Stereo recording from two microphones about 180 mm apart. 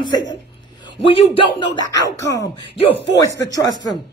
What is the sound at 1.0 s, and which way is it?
Speech, 30° left (ahead or behind).